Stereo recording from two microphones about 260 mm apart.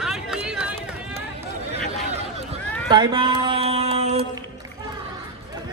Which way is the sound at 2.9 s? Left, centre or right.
Centre.